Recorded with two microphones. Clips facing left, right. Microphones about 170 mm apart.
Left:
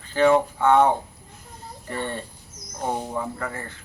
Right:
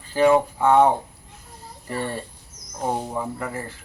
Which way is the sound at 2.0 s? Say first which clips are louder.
Right 1 dB; 5° right (ahead or behind).